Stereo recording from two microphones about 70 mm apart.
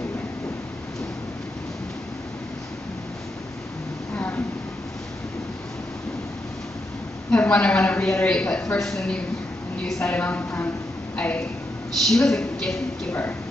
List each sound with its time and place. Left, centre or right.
4.1 s a sound: left
7.2 s a woman's voice: centre
10.1 s a woman's voice: left
12.1 s speech: centre